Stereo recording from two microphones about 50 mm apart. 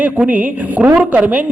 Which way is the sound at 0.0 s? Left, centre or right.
Right.